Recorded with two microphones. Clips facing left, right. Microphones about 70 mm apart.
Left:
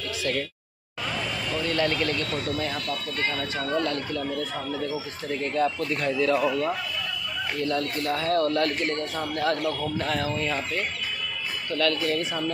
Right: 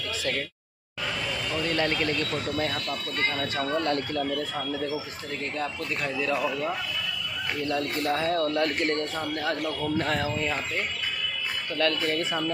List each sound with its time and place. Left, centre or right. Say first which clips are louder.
1.7 s speech: left 2 dB; right
3.3 s speech: even; centre
3.8 s speech: right 1 dB; right
5.6 s speech: left 7 dB; centre
7.7 s speech: right 2 dB; centre
9.9 s speech: even; right
10.3 s speech: left 1 dB; centre
11.7 s speech: left 1 dB; right